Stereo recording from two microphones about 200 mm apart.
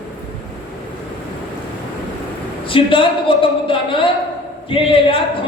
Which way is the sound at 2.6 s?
25° left (ahead or behind).